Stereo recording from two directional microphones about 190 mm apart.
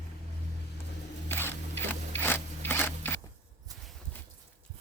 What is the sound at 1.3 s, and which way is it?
Zipper, 10° left (ahead or behind).